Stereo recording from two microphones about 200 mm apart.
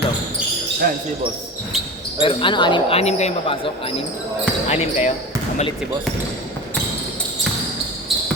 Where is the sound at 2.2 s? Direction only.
25° left (ahead or behind).